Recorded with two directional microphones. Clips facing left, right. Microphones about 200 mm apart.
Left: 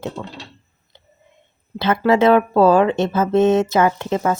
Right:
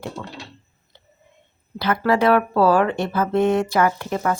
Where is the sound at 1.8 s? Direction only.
25° left (ahead or behind).